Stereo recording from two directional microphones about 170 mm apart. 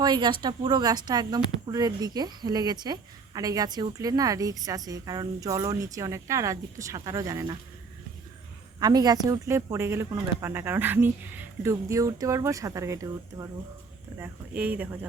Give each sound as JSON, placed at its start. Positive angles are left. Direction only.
{"t": 0.0, "sound": "a woman's voice", "side_deg": -25}
{"t": 8.8, "sound": "speech", "side_deg": -25}